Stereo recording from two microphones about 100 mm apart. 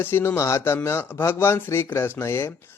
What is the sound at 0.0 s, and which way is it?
A man's voice, 20° left (ahead or behind).